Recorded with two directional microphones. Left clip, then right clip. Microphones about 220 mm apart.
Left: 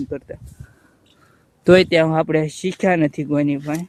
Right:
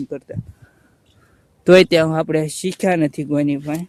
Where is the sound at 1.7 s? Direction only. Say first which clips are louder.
Right 2 dB; 30° right (ahead or behind).